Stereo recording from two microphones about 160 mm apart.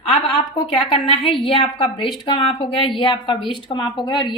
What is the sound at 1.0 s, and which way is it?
A woman's voice, 35° left (ahead or behind).